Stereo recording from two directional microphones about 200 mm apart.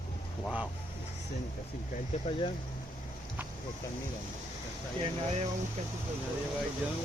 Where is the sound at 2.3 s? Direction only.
30° left (ahead or behind).